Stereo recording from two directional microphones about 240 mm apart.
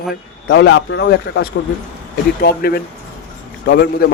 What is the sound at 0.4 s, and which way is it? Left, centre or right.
A man's voice, left.